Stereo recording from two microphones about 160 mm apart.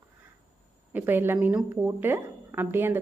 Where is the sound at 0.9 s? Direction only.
10° right (ahead or behind).